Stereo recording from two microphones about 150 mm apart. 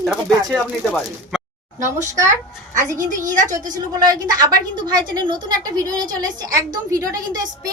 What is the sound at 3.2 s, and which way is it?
Speech, 60° right (ahead or behind).